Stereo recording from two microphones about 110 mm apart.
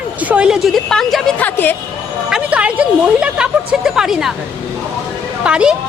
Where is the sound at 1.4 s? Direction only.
15° left (ahead or behind).